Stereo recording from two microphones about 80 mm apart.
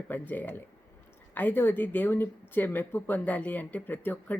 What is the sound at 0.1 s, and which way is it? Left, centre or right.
Speech, left.